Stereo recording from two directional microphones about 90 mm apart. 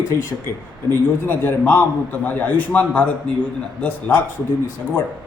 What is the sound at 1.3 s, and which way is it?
A man's voice, 20° left (ahead or behind).